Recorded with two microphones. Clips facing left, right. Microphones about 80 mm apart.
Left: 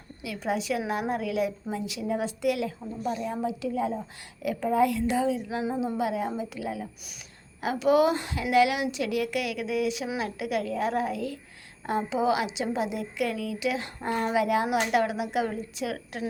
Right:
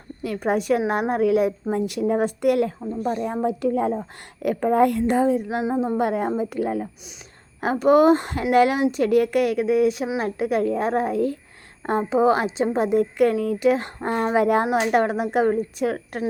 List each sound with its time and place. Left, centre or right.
0.2 s a woman's voice: right